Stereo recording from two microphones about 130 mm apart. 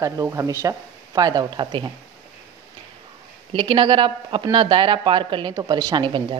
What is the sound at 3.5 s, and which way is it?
Speech, 40° right (ahead or behind).